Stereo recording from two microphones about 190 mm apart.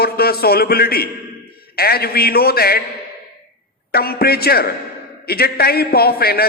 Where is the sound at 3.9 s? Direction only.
55° left (ahead or behind).